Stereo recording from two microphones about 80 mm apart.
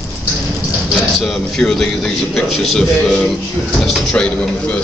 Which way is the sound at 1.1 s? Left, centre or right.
Centre.